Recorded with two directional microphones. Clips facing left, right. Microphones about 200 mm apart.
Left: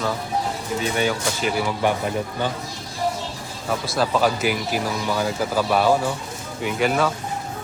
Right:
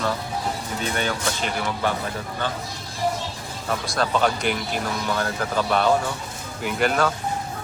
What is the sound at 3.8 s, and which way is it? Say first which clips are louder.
Speech: left 2 dB; 5° left (ahead or behind).